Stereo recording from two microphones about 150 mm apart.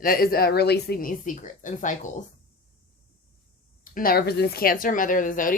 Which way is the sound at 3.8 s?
70° left (ahead or behind).